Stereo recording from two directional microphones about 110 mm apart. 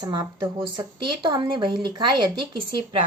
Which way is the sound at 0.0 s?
40° right (ahead or behind).